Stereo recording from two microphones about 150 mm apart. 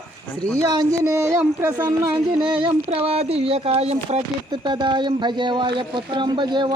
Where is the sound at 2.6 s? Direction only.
40° right (ahead or behind).